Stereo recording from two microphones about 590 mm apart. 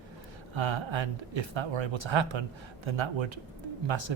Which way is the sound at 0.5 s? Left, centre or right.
Right.